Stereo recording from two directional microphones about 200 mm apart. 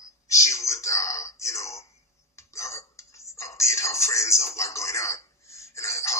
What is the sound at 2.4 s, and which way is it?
Whispering, 15° left (ahead or behind).